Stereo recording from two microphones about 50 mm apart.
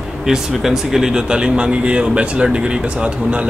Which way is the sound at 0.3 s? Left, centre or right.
Centre.